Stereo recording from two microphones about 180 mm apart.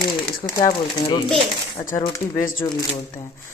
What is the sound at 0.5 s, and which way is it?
Speech, 25° left (ahead or behind).